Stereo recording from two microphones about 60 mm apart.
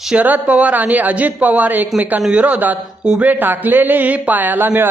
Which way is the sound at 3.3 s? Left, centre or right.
Right.